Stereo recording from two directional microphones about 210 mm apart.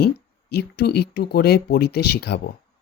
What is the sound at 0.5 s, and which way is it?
Speech, 50° left (ahead or behind).